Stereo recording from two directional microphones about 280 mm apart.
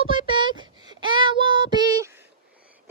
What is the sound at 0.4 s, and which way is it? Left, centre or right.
Child singing, centre.